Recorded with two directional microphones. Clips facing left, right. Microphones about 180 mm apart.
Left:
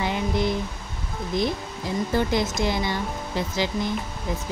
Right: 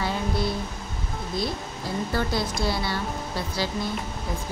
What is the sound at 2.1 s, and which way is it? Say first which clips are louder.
Speech: left 4 dB; 20° left (ahead or behind).